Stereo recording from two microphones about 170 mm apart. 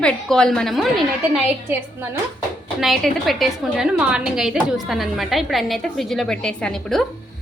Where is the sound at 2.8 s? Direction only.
Centre (ahead or behind).